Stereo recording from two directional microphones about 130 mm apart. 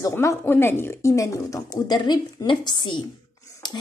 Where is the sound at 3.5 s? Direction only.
30° left (ahead or behind).